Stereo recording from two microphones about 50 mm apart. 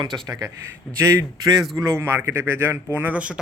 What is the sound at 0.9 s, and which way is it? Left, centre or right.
A man's voice, right.